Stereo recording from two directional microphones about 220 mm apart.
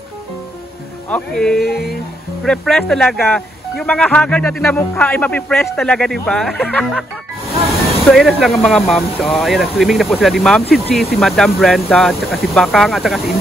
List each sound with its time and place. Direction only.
1.1 s speech: 5° left (ahead or behind)
8.1 s speech: centre (ahead or behind)